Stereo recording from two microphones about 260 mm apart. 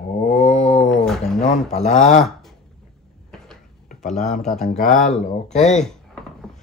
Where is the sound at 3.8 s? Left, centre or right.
Left.